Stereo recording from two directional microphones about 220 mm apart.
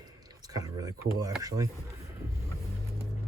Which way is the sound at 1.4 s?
15° right (ahead or behind).